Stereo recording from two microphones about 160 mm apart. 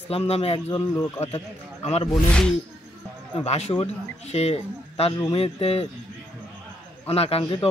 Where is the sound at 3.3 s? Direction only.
40° left (ahead or behind).